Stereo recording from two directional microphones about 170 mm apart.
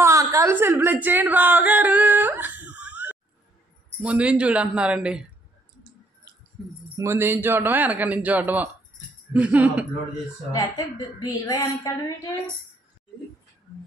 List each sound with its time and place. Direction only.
0.0 s a sound: 15° right (ahead or behind)
4.0 s a man's voice: 5° right (ahead or behind)
7.0 s a man's voice: 15° right (ahead or behind)
10.5 s a woman's voice: 20° left (ahead or behind)